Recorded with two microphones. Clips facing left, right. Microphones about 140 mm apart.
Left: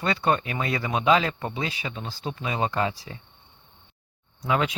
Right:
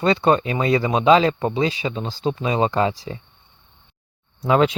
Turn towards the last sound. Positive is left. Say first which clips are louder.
# right 8 dB
turn(degrees=-30)  # may be behind; listen again after turning